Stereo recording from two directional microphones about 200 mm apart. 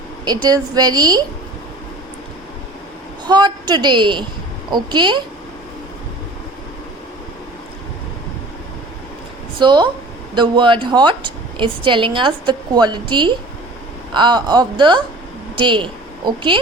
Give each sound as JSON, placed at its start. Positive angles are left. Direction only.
{"t": 0.3, "sound": "a woman's voice", "side_deg": -20}
{"t": 3.2, "sound": "a woman's voice", "side_deg": -20}
{"t": 9.6, "sound": "a woman's voice", "side_deg": -25}